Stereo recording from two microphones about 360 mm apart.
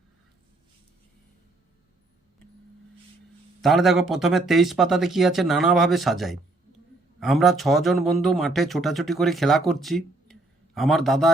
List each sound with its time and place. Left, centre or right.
3.6 s speech: centre